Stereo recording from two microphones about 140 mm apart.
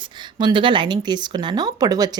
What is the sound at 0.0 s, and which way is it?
Speech, 35° right (ahead or behind).